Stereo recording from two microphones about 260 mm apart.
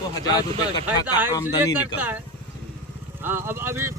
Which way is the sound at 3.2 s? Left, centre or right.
Centre.